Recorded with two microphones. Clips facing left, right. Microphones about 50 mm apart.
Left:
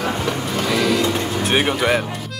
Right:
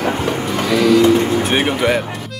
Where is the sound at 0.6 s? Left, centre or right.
Centre.